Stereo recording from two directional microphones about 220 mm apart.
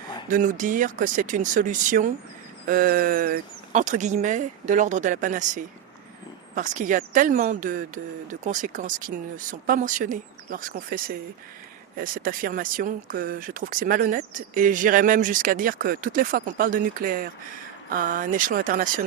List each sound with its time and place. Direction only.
0.3 s speech: 40° right (ahead or behind)